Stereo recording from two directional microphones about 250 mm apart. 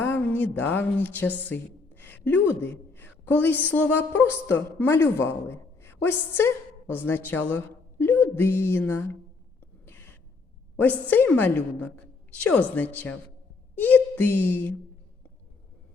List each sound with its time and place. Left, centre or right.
0.0 s a woman's voice: centre
1.5 s gasp: centre
2.5 s a woman's voice: centre
9.8 s a sound: centre
11.1 s a woman's voice: centre